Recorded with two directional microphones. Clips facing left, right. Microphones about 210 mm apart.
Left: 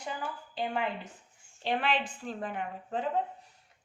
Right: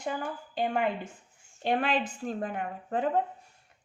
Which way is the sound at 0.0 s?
50° right (ahead or behind).